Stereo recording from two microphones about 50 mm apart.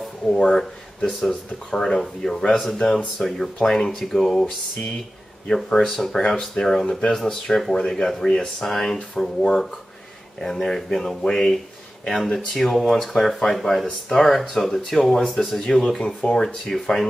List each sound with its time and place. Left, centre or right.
0.3 s speech: centre
5.7 s speech: centre